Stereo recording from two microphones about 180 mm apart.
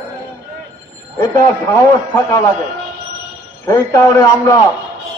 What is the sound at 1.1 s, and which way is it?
A man's voice, 20° left (ahead or behind).